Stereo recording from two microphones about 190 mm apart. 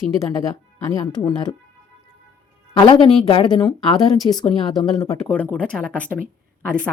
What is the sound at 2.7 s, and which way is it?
Speech, 25° left (ahead or behind).